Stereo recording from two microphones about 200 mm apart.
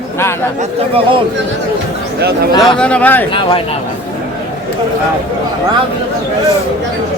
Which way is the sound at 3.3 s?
25° left (ahead or behind).